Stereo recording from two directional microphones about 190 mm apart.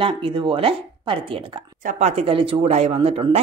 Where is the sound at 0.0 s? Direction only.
25° right (ahead or behind).